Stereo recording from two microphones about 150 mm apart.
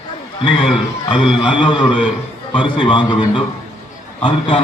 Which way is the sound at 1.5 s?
35° left (ahead or behind).